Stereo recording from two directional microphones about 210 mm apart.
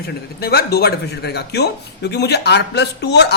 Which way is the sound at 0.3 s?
50° left (ahead or behind).